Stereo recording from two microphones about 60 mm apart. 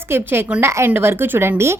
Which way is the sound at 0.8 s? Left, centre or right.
Right.